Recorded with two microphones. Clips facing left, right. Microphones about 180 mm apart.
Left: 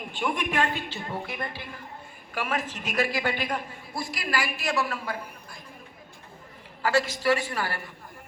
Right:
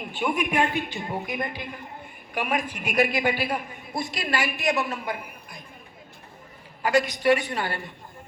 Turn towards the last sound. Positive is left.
turn(degrees=-20)  # may be behind; listen again after turning